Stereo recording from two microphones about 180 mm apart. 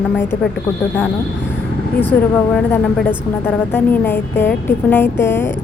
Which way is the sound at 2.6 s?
5° left (ahead or behind).